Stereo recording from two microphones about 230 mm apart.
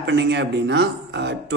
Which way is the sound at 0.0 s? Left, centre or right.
Right.